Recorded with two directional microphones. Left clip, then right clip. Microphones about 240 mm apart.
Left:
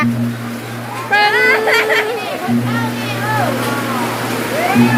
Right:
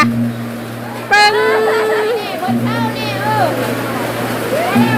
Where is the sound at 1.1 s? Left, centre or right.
Centre.